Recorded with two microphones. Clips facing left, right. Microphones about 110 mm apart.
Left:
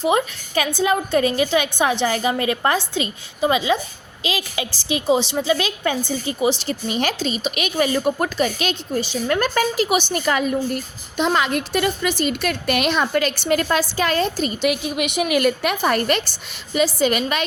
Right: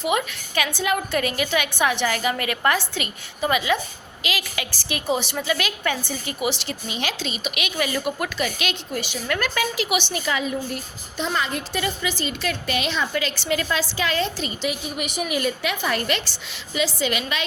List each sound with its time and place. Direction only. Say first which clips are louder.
0.0 s a woman's voice: left 4 dB; 35° left (ahead or behind)
6.8 s a woman's voice: left 6 dB; 45° left (ahead or behind)
11.2 s a woman's voice: left 6 dB; 70° left (ahead or behind); by 14.7 s 45° left (ahead or behind)
14.7 s a woman's voice: left 6 dB; 80° left; by 17.4 s 45° left (ahead or behind)